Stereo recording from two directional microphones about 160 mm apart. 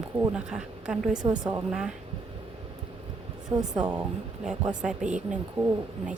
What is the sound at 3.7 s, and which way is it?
A woman's voice, 10° right (ahead or behind).